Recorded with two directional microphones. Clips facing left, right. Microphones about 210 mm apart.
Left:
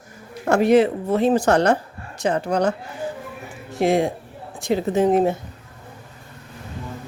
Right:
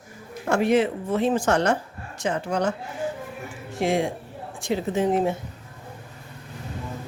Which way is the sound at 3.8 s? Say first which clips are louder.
Left 4 dB; 40° left (ahead or behind).